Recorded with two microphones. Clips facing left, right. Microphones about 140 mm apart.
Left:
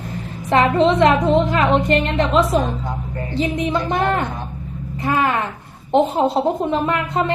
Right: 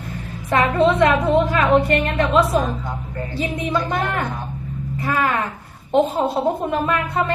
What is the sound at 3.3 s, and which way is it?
A woman's voice, 20° left (ahead or behind).